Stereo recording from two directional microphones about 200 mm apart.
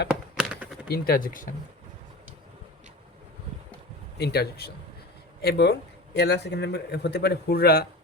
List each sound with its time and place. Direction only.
0.1 s a sound: 5° right (ahead or behind)
0.9 s speech: 50° left (ahead or behind)
4.2 s a man's voice: 55° left (ahead or behind)